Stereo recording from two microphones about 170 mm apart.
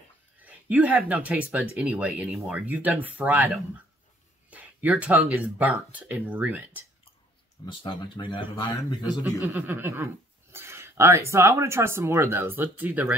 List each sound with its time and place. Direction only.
0.4 s speech: 10° right (ahead or behind)
4.5 s a sound: 10° right (ahead or behind)
5.4 s speech: 10° right (ahead or behind)
7.6 s speech: 30° left (ahead or behind)
9.2 s speech: 10° right (ahead or behind)